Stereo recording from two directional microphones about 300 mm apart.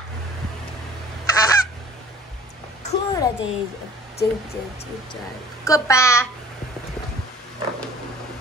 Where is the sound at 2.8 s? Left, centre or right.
Left.